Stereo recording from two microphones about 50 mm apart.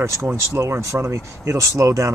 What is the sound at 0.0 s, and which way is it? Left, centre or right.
Speech, right.